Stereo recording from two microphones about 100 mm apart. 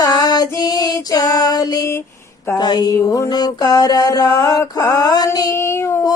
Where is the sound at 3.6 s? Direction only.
40° left (ahead or behind).